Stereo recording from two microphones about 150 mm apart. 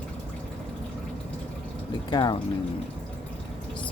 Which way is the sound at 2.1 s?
30° left (ahead or behind).